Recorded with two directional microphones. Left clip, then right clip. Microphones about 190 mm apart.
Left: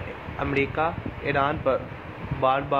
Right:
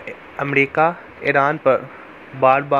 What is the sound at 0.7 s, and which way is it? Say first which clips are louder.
Speech: right 9 dB; 35° right (ahead or behind).